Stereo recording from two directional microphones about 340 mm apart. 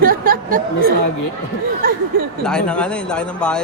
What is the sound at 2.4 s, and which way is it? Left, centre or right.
Speech, centre.